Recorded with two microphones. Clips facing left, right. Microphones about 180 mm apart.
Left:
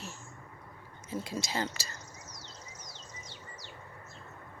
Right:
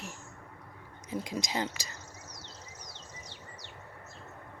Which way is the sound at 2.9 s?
65° right (ahead or behind).